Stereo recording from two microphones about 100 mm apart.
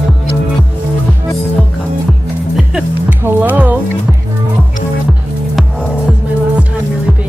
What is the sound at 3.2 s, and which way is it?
Music, 20° right (ahead or behind).